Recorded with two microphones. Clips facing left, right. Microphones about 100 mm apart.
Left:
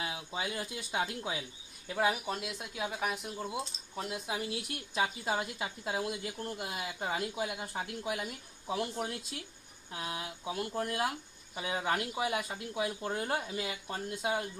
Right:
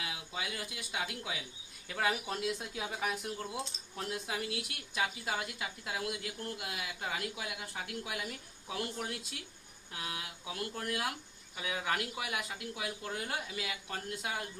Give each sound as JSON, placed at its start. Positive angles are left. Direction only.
{"t": 0.0, "sound": "speech", "side_deg": 35}
{"t": 2.0, "sound": "speech", "side_deg": 10}
{"t": 3.3, "sound": "speech", "side_deg": 15}
{"t": 4.9, "sound": "speech", "side_deg": 30}
{"t": 9.9, "sound": "speech", "side_deg": 30}